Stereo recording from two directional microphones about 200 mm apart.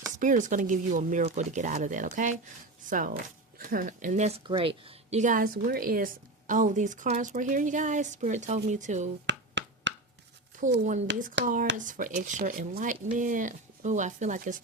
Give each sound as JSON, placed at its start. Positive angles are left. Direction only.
{"t": 0.2, "sound": "speech", "side_deg": -40}
{"t": 9.2, "sound": "finger snapping", "side_deg": -65}
{"t": 10.5, "sound": "a sound", "side_deg": -40}
{"t": 11.1, "sound": "speech", "side_deg": -60}
{"t": 11.9, "sound": "speech", "side_deg": -40}